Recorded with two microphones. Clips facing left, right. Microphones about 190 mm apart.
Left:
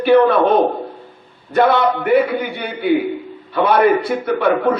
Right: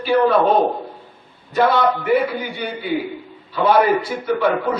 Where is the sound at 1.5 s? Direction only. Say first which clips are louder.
Left 2 dB; 60° left (ahead or behind).